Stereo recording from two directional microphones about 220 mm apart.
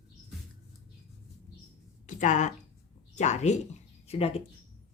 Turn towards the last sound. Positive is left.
turn(degrees=25)  # may be behind; listen again after turning